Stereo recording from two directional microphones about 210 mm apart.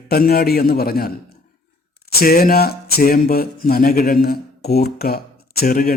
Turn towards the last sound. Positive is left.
turn(degrees=45)  # may be behind; listen again after turning